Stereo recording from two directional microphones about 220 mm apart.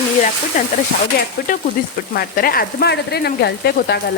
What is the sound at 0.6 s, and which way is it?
Speech, 35° left (ahead or behind).